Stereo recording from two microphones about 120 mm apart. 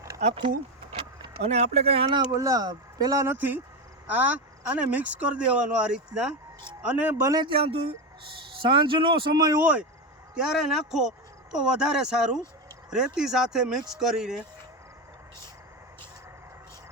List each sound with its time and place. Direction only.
1.5 s speech: 60° right (ahead or behind)
2.1 s speech: 30° right (ahead or behind)
3.3 s speech: 15° right (ahead or behind)
7.3 s speech: 35° right (ahead or behind)
7.5 s speech: 50° right (ahead or behind); by 9.6 s 35° right (ahead or behind)
9.6 s speech: 10° right (ahead or behind)